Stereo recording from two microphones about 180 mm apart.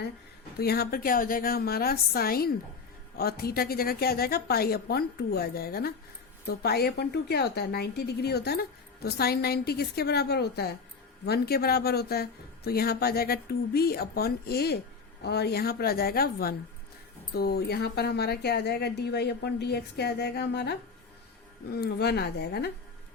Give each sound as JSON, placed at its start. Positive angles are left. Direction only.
{"t": 0.6, "sound": "speech", "side_deg": 60}